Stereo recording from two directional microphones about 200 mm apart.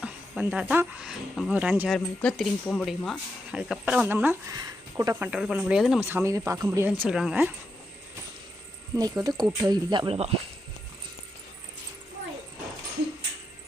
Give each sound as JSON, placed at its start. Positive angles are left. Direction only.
{"t": 0.0, "sound": "speech", "side_deg": -5}
{"t": 5.3, "sound": "speech", "side_deg": -5}
{"t": 9.0, "sound": "speech", "side_deg": -20}